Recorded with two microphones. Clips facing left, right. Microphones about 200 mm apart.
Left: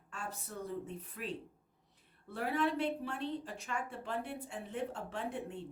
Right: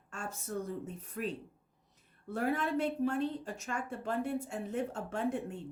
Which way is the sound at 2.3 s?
45° right (ahead or behind).